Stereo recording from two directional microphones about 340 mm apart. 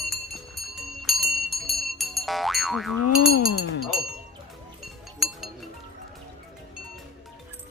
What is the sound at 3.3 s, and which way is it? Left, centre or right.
Speech, left.